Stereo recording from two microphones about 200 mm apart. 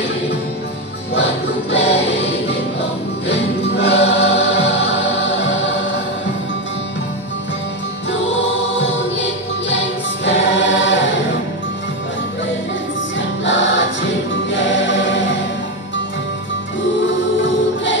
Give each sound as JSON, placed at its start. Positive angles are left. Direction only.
{"t": 1.7, "sound": "music", "side_deg": 60}
{"t": 10.2, "sound": "choir", "side_deg": 65}
{"t": 13.5, "sound": "choir", "side_deg": 65}